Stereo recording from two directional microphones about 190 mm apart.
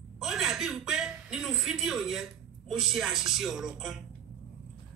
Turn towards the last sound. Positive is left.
turn(degrees=0)  # may be behind; listen again after turning